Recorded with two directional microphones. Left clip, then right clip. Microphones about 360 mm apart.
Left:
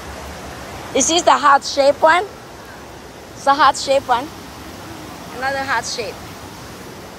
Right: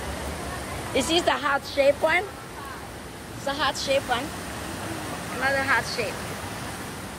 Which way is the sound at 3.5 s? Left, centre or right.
Centre.